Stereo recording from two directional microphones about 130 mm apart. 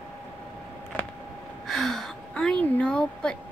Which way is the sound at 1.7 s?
Centre (ahead or behind).